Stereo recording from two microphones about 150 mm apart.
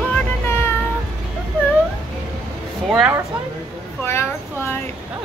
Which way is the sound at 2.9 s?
5° right (ahead or behind).